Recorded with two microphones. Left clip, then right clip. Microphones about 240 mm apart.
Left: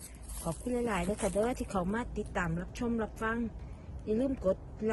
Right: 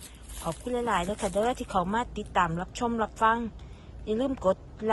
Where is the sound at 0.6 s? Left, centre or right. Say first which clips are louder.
Right 5 dB; centre.